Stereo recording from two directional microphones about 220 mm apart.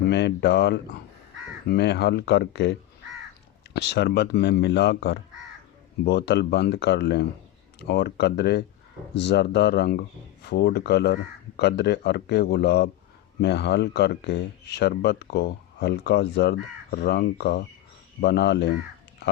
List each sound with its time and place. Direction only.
0.1 s speech: 50° left (ahead or behind)
3.8 s speech: 50° left (ahead or behind)